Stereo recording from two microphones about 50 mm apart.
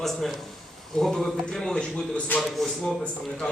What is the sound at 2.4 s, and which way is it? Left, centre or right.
Speech, centre.